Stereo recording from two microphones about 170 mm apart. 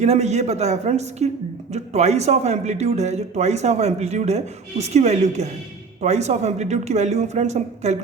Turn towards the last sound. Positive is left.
turn(degrees=-40)  # may be behind; listen again after turning